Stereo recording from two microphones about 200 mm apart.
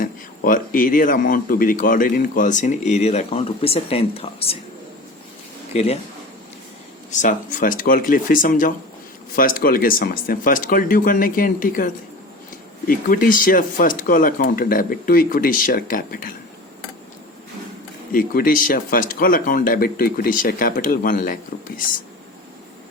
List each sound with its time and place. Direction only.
0.0 s speech: 45° left (ahead or behind); by 4.5 s 30° left (ahead or behind)
5.7 s speech: 30° left (ahead or behind)
7.1 s speech: 40° left (ahead or behind)
12.9 s speech: 45° left (ahead or behind)
18.1 s speech: 45° left (ahead or behind)